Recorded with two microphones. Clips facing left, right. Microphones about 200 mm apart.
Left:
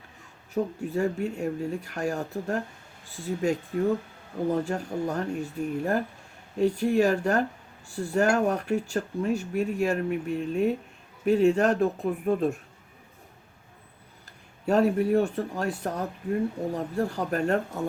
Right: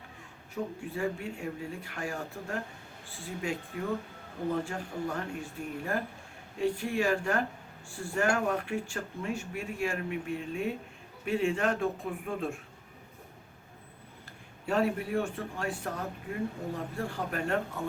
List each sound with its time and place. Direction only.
0.5 s speech: 45° left (ahead or behind)
4.6 s speech: 40° left (ahead or behind)
14.7 s speech: 40° left (ahead or behind)